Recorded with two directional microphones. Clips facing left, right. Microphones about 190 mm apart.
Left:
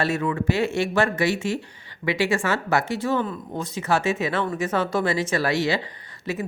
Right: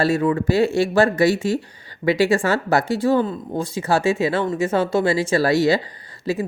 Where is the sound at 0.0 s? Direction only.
35° right (ahead or behind).